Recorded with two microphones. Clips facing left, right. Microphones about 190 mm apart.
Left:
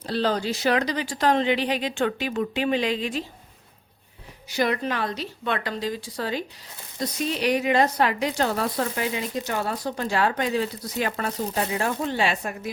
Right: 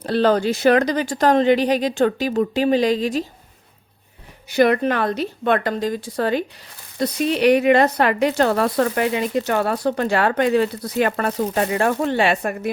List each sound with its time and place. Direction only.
0.0 s speech: 60° right (ahead or behind); by 3.2 s 40° right (ahead or behind)
4.4 s speech: 55° right (ahead or behind)